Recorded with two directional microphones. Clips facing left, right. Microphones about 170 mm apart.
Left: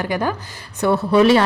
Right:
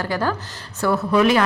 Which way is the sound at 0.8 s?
30° left (ahead or behind).